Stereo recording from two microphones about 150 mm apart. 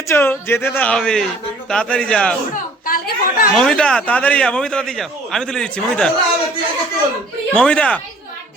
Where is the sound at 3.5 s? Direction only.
5° left (ahead or behind).